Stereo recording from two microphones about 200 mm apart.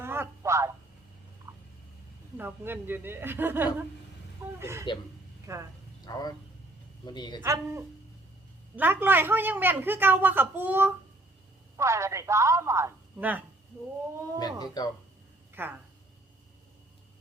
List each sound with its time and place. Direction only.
0.0 s speech: 10° right (ahead or behind)
2.4 s a woman's voice: 10° right (ahead or behind)
6.1 s speech: 20° left (ahead or behind)
7.4 s a woman's voice: 15° right (ahead or behind)
14.3 s speech: 20° left (ahead or behind)
15.6 s a woman's voice: 10° right (ahead or behind)